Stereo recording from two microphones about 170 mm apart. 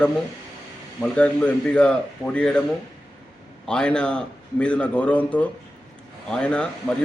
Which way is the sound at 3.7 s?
5° left (ahead or behind).